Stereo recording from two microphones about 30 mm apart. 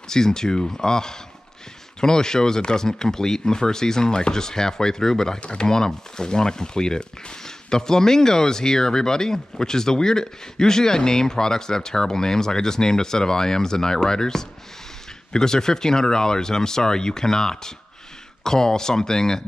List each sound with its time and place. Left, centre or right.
0.1 s speech: centre